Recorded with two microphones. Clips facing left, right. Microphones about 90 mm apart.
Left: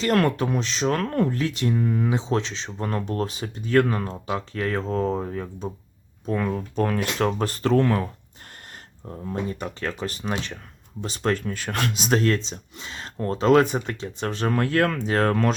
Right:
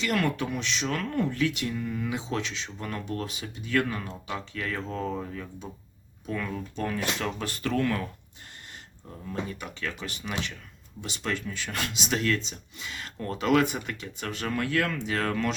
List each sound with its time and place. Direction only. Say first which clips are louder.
0.0 s speech: left 6 dB; 45° left (ahead or behind)